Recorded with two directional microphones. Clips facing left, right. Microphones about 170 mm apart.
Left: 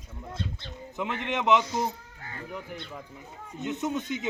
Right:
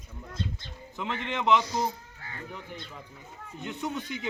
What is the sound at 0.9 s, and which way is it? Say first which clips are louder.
Speech: left 2 dB; 20° left (ahead or behind).